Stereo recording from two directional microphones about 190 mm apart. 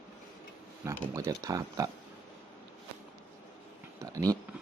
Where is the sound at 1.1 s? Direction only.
15° right (ahead or behind).